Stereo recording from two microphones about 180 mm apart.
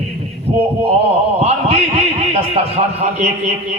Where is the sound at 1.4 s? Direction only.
35° right (ahead or behind).